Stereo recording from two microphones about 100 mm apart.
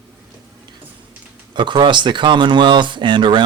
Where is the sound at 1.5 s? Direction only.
50° right (ahead or behind).